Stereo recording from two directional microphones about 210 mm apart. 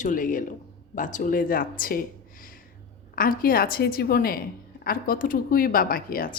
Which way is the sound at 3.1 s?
45° left (ahead or behind).